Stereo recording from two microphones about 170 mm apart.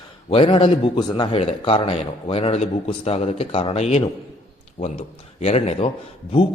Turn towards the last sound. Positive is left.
turn(degrees=35)  # may be behind; listen again after turning